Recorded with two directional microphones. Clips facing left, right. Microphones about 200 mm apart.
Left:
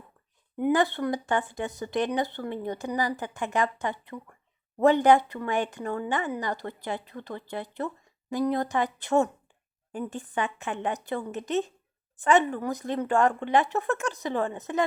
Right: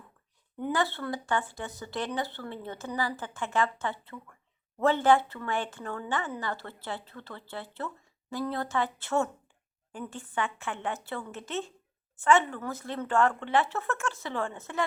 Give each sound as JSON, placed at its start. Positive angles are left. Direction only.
{"t": 0.5, "sound": "a woman's voice", "side_deg": 20}